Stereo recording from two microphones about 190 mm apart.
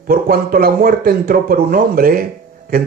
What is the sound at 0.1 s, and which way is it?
Speech, 50° right (ahead or behind).